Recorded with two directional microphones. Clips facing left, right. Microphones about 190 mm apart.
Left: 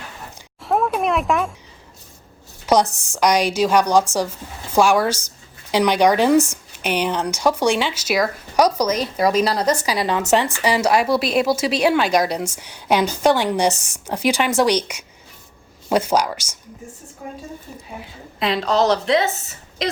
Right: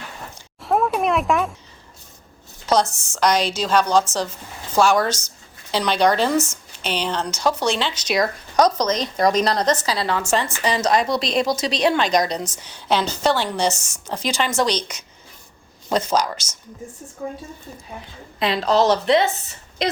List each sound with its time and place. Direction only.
0.6 s a sound: centre (ahead or behind)
2.9 s speech: 15° left (ahead or behind)
13.7 s speech: 35° left (ahead or behind)
14.1 s speech: 15° left (ahead or behind)
18.0 s a woman's voice: centre (ahead or behind)